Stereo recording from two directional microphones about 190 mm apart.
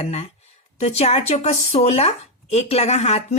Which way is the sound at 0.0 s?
35° left (ahead or behind).